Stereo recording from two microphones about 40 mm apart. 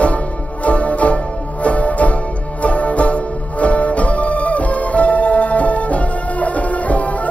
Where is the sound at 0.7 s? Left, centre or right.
Left.